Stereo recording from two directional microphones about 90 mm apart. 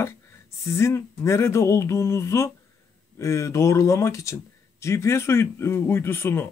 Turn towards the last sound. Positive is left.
turn(degrees=25)  # may be behind; listen again after turning